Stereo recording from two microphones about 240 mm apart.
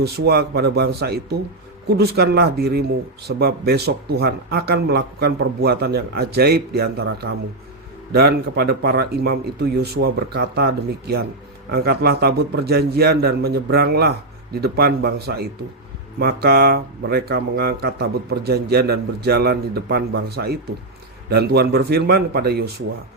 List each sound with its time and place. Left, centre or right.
0.0 s speech: right
8.1 s speech: right